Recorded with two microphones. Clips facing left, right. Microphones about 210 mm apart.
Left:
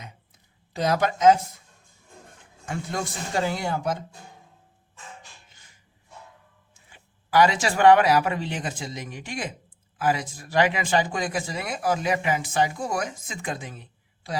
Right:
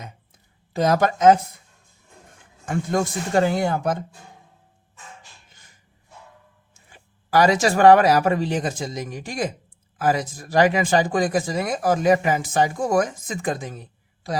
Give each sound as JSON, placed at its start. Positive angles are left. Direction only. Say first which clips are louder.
{"t": 0.7, "sound": "speech", "louder": "right 4 dB", "side_deg": -50}
{"t": 2.6, "sound": "speech", "louder": "right 7 dB", "side_deg": -50}
{"t": 6.9, "sound": "speech", "louder": "right 1 dB", "side_deg": -40}